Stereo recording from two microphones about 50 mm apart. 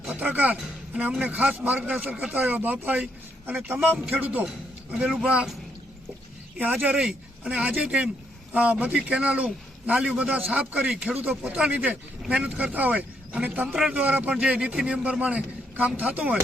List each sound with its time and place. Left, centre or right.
0.1 s a man's voice: right
6.6 s a man's voice: right
10.8 s a man's voice: centre
11.2 s a man's voice: right